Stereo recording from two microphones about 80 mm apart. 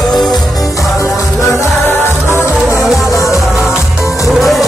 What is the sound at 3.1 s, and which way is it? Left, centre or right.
Music, left.